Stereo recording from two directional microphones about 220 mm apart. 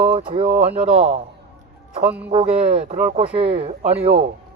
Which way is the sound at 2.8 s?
35° right (ahead or behind).